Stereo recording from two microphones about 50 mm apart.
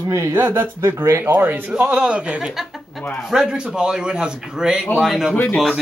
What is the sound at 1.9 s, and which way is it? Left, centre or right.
Speech, right.